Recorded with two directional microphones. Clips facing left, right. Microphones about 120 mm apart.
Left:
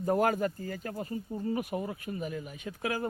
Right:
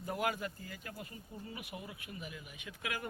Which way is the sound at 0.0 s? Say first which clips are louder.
Left 10 dB; 45° left (ahead or behind).